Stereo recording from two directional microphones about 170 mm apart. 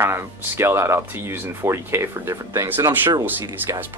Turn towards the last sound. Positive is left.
turn(degrees=-10)  # may be behind; listen again after turning